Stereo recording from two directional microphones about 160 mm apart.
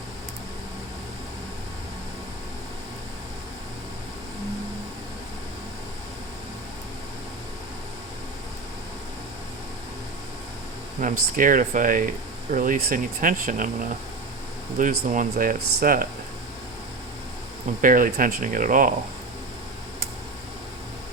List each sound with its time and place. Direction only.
11.0 s speech: 60° right (ahead or behind)
14.8 s speech: 55° right (ahead or behind)
17.7 s speech: 60° right (ahead or behind)